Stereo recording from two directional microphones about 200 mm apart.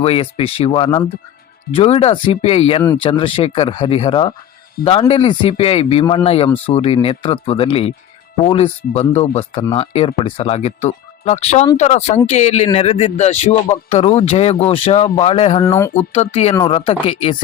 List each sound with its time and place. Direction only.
0.0 s a man's voice: 30° left (ahead or behind)
15.6 s speech: 15° left (ahead or behind)
16.1 s a man's voice: 30° left (ahead or behind)